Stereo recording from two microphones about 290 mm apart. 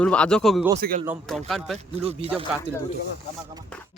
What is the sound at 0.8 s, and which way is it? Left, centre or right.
Speech, right.